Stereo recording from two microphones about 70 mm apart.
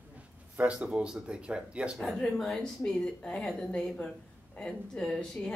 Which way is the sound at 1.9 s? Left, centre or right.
Centre.